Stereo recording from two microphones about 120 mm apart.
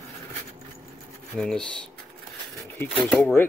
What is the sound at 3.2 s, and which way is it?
Speech, 15° left (ahead or behind).